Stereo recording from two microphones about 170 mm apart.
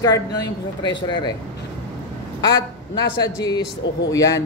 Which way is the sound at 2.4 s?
25° left (ahead or behind).